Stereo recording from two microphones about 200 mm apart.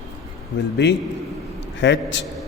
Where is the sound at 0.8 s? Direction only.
60° left (ahead or behind).